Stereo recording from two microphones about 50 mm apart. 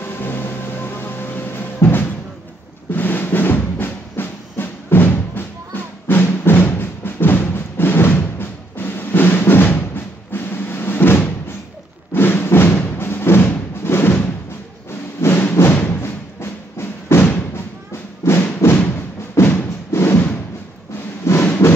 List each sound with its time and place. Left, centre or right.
0.0 s a sound: left
2.9 s music: left
10.3 s cupboard open or close: left
12.1 s music: left
15.2 s music: left
16.0 s music: left
18.2 s music: left
19.3 s thump: left
21.3 s a sound: left